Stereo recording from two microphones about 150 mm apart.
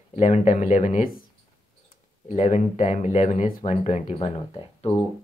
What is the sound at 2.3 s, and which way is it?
Speech, 50° left (ahead or behind).